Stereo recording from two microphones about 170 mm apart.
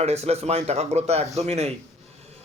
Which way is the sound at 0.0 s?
40° right (ahead or behind).